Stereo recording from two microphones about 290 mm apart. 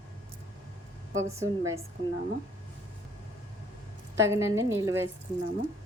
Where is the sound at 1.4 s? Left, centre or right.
Centre.